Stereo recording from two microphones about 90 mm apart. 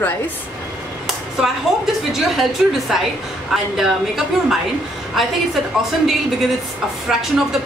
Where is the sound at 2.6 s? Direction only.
Centre (ahead or behind).